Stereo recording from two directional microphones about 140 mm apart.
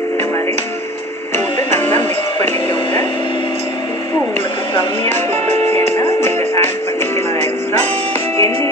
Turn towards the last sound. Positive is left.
turn(degrees=20)  # may be behind; listen again after turning